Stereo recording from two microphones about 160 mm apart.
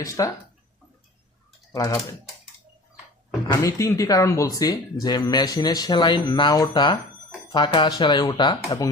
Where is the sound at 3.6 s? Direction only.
20° left (ahead or behind).